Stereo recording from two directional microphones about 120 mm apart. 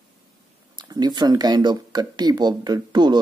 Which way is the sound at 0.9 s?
35° right (ahead or behind).